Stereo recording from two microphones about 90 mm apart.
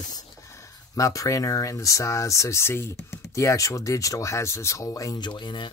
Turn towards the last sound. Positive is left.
turn(degrees=60)  # may be behind; listen again after turning